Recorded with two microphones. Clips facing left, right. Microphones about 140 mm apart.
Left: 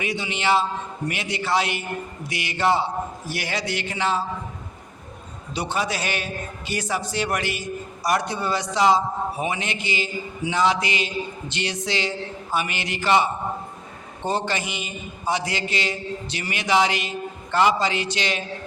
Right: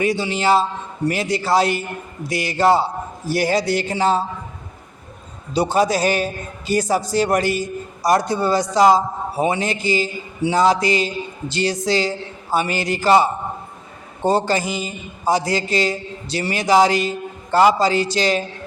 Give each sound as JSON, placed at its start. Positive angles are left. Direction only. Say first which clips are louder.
{"t": 0.0, "sound": "a man's voice", "louder": "right 7 dB", "side_deg": -35}
{"t": 5.5, "sound": "a man's voice", "louder": "right 9 dB", "side_deg": -40}